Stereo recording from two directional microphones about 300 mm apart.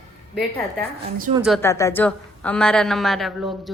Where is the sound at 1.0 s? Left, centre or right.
Right.